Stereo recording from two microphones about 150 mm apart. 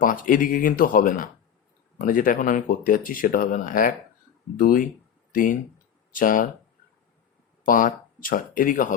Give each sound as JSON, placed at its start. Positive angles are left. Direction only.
{"t": 0.0, "sound": "speech", "side_deg": 65}
{"t": 7.6, "sound": "speech", "side_deg": 65}